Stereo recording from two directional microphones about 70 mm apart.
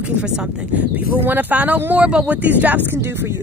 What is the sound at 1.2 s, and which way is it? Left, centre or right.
Speech, right.